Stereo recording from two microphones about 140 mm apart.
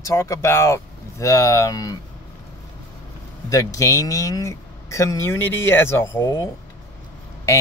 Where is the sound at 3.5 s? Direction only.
25° left (ahead or behind).